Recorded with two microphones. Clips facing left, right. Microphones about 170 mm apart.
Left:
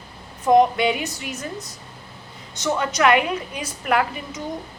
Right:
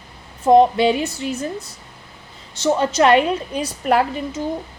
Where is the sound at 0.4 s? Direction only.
30° right (ahead or behind).